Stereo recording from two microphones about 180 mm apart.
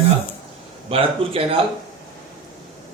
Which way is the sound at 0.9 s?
30° right (ahead or behind).